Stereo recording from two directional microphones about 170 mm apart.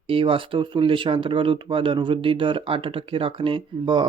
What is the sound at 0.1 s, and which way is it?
Speech, 30° right (ahead or behind).